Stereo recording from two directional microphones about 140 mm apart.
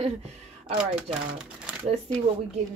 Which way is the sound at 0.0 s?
45° right (ahead or behind).